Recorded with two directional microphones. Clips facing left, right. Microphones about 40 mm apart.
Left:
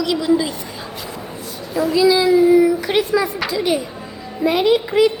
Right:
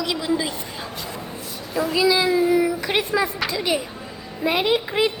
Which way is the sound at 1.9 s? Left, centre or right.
Centre.